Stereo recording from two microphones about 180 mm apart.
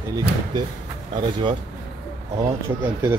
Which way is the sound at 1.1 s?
25° right (ahead or behind).